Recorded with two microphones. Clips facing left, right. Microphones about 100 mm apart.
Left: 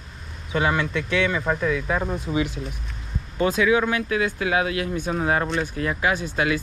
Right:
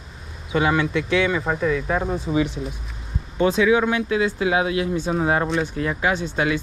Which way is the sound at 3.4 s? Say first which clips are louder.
Right 2 dB; 30° right (ahead or behind).